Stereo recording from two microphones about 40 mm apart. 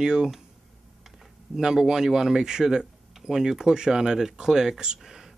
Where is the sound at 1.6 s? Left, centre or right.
Centre.